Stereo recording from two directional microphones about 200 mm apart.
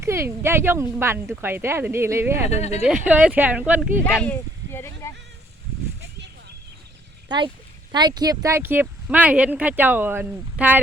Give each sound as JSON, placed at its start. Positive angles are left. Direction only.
{"t": 0.0, "sound": "speech", "side_deg": -15}
{"t": 2.5, "sound": "speech", "side_deg": 35}
{"t": 2.8, "sound": "speech", "side_deg": -5}
{"t": 4.0, "sound": "speech", "side_deg": 5}
{"t": 7.3, "sound": "speech", "side_deg": -25}